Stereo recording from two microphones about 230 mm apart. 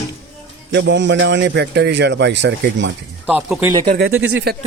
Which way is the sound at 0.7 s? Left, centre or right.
Right.